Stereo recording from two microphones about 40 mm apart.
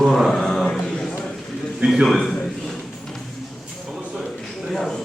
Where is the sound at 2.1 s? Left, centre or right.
Centre.